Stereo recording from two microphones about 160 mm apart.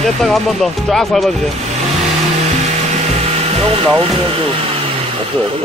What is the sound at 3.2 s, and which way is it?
Speech, 40° right (ahead or behind).